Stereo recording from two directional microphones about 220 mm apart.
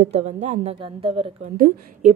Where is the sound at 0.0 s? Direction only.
30° right (ahead or behind).